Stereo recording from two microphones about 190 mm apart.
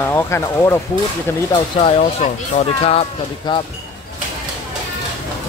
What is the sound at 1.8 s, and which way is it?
Speech, 35° left (ahead or behind).